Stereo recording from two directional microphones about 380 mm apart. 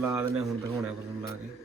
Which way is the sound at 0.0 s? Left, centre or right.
Centre.